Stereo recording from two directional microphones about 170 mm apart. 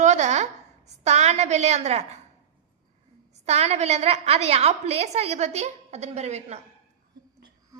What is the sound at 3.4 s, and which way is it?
A woman's voice, 40° right (ahead or behind).